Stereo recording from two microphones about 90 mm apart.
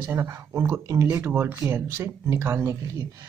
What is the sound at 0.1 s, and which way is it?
Speech, 30° right (ahead or behind).